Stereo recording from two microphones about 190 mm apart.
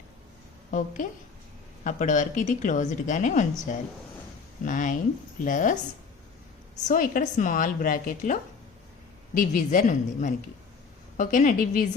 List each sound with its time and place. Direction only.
1.8 s a woman's voice: 40° left (ahead or behind)
6.8 s a woman's voice: 45° left (ahead or behind)